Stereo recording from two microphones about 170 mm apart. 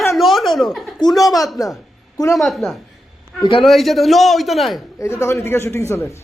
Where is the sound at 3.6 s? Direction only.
Centre (ahead or behind).